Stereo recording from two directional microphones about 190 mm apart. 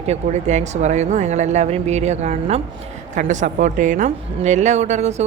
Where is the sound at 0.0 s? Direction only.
35° right (ahead or behind).